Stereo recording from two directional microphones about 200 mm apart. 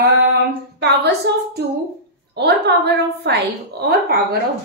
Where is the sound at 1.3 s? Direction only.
60° right (ahead or behind).